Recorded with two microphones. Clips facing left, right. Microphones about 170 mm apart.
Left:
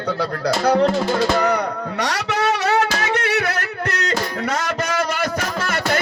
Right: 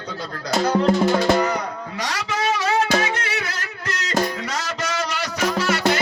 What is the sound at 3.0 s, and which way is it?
Music, 65° left (ahead or behind).